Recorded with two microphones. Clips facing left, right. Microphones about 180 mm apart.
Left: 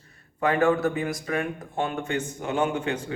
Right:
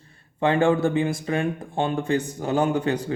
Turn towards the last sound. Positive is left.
turn(degrees=-35)  # may be behind; listen again after turning